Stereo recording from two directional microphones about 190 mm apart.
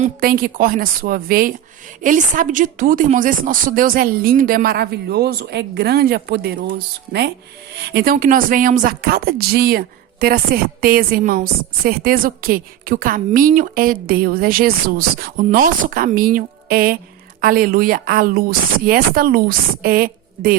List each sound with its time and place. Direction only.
0.0 s speech: 50° right (ahead or behind)